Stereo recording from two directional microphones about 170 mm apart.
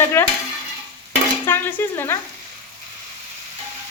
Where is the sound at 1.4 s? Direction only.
15° left (ahead or behind).